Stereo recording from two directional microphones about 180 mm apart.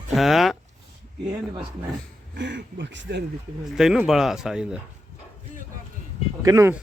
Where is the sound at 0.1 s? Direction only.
Centre (ahead or behind).